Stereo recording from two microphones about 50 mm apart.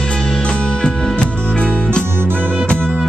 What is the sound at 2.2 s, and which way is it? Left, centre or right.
Music, right.